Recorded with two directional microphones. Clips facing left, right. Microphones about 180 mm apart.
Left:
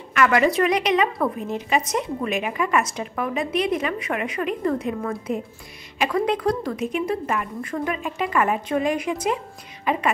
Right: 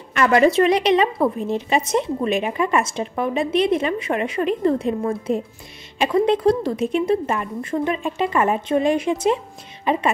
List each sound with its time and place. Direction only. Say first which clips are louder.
0.1 s a woman's voice: right 3 dB; 30° right (ahead or behind)